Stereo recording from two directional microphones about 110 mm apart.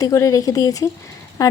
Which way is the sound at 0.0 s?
30° left (ahead or behind).